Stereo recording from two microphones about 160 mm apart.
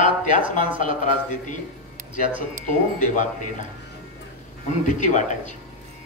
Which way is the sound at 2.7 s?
50° left (ahead or behind).